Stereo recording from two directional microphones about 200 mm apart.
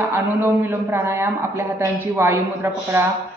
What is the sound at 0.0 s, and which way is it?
A man's voice, 10° right (ahead or behind).